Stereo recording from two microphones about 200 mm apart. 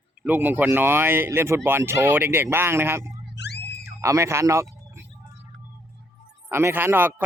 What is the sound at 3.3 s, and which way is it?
Screaming, 60° left (ahead or behind).